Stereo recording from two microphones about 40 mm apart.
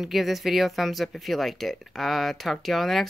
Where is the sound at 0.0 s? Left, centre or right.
Centre.